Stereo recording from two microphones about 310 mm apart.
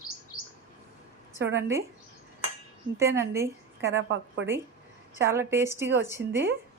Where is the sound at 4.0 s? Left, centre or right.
Right.